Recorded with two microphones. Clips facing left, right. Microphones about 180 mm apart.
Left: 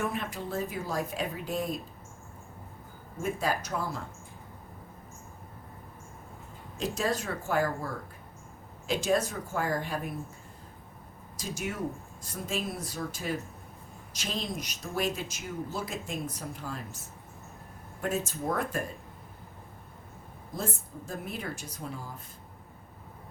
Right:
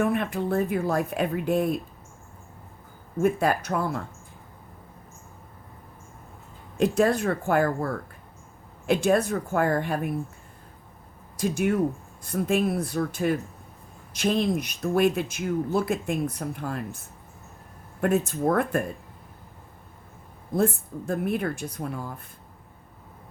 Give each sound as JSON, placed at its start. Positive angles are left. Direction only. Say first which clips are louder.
{"t": 0.0, "sound": "speech", "louder": "right 8 dB", "side_deg": -60}
{"t": 3.2, "sound": "speech", "louder": "right 8 dB", "side_deg": -60}
{"t": 6.7, "sound": "speech", "louder": "right 9 dB", "side_deg": -60}
{"t": 11.3, "sound": "speech", "louder": "right 11 dB", "side_deg": -55}
{"t": 18.0, "sound": "speech", "louder": "right 8 dB", "side_deg": -60}
{"t": 20.5, "sound": "speech", "louder": "right 11 dB", "side_deg": -60}